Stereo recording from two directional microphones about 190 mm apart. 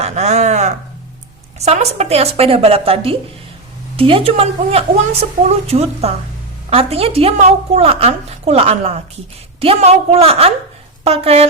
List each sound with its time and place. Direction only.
0.0 s a woman's voice: 35° right (ahead or behind)